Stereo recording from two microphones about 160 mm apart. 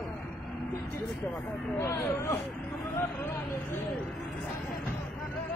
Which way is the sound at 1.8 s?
15° left (ahead or behind).